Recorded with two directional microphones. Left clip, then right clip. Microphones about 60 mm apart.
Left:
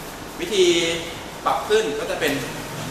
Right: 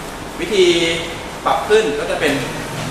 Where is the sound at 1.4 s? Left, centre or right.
Left.